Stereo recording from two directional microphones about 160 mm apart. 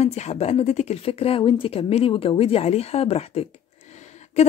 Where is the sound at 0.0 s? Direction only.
45° left (ahead or behind).